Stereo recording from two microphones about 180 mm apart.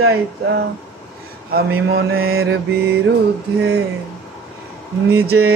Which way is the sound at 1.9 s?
65° right (ahead or behind).